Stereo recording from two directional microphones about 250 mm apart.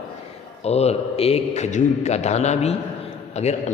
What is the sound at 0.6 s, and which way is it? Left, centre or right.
A man's voice, left.